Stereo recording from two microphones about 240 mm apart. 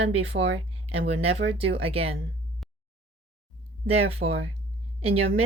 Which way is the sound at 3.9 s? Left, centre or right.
Right.